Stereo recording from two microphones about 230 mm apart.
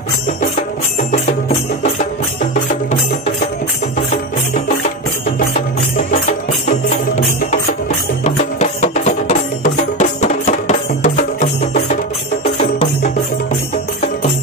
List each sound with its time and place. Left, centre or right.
2.5 s music: left
8.2 s music: left